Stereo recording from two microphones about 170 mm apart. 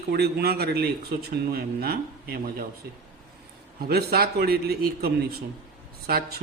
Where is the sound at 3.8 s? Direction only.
65° right (ahead or behind).